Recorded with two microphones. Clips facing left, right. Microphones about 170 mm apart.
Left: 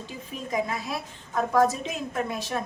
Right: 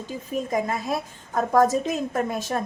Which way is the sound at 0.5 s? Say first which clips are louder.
Right 2 dB; 45° right (ahead or behind).